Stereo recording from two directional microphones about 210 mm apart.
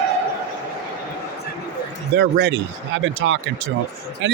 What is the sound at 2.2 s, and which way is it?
Speech, 55° right (ahead or behind).